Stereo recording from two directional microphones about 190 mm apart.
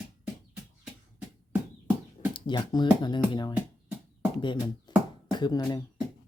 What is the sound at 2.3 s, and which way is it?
Speech, 25° left (ahead or behind).